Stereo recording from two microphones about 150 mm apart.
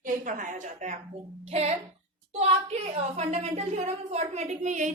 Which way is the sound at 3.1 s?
50° right (ahead or behind).